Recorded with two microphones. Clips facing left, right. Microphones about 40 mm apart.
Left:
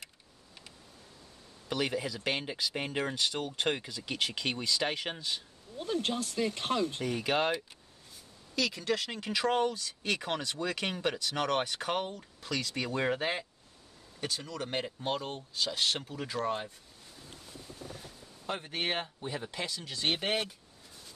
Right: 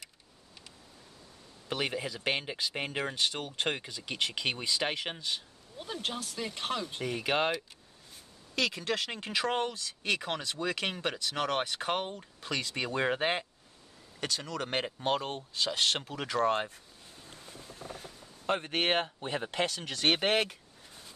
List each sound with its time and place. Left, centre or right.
1.7 s speech: centre
6.0 s speech: right; by 7.5 s centre
8.5 s speech: right
9.4 s speech: right
10.2 s speech: centre
10.6 s speech: centre
12.4 s speech: right
14.2 s speech: right
15.0 s speech: right
17.3 s a sound: right
19.6 s speech: right